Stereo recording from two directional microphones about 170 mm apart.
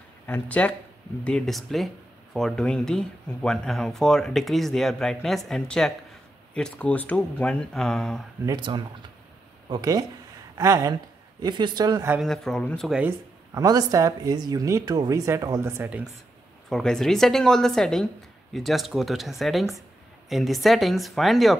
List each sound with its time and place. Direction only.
0.3 s speech: 5° left (ahead or behind)
8.5 s speech: 25° right (ahead or behind)
12.2 s speech: 5° left (ahead or behind)
13.6 s speech: 20° right (ahead or behind)
16.6 s speech: 5° left (ahead or behind)